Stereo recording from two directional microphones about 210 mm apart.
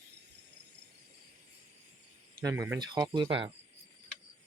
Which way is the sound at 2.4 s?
15° right (ahead or behind).